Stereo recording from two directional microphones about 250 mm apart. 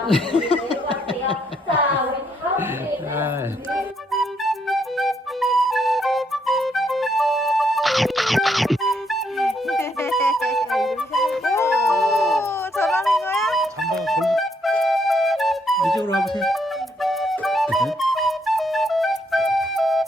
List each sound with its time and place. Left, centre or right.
0.3 s a sound: left
3.2 s music: centre
10.0 s music: centre
12.7 s a sound: centre
13.5 s music: centre
17.0 s flute: centre